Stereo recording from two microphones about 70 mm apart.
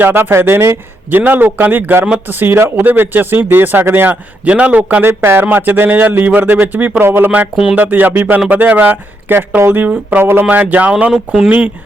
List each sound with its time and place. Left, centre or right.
0.0 s speech: right
5.0 s speech: right
7.5 s music: centre
7.8 s speech: right